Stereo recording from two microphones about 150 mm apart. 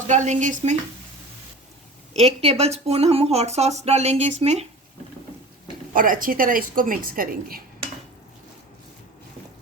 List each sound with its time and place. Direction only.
0.1 s speech: 55° right (ahead or behind)
2.1 s speech: 45° right (ahead or behind)
5.9 s a woman's voice: 65° right (ahead or behind)